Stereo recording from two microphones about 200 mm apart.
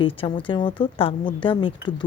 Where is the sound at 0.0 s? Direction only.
25° left (ahead or behind).